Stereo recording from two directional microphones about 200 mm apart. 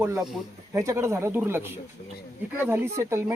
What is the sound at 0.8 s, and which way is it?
Speech, 15° right (ahead or behind).